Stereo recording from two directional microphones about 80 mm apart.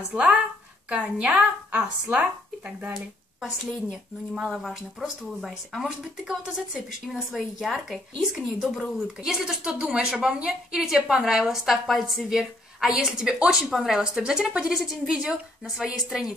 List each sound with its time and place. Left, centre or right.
0.1 s a woman's voice: centre
4.4 s a woman's voice: centre